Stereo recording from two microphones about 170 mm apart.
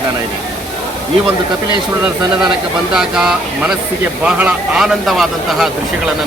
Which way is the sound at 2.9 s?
5° right (ahead or behind).